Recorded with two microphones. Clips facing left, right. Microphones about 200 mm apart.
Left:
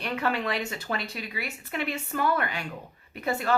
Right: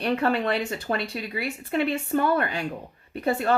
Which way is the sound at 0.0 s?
30° right (ahead or behind).